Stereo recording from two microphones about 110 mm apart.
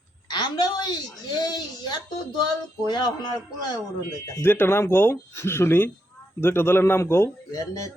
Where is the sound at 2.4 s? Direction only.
40° left (ahead or behind).